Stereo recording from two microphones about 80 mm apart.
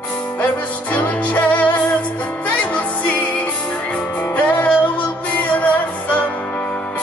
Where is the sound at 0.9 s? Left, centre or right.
Left.